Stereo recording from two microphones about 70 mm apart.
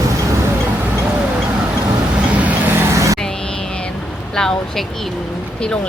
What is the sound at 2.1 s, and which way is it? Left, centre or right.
Vehicle, centre.